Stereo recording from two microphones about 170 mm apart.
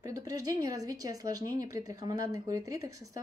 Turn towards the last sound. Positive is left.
turn(degrees=-20)  # may be behind; listen again after turning